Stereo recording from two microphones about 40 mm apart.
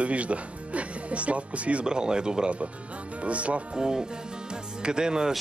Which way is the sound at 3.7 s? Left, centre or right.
Centre.